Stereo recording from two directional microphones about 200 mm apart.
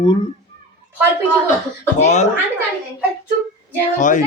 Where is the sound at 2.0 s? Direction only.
35° left (ahead or behind).